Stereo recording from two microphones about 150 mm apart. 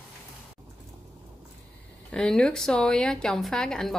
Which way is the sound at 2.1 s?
5° left (ahead or behind).